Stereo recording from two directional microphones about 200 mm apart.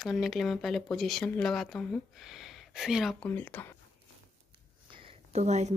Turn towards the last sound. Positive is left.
turn(degrees=-35)  # may be behind; listen again after turning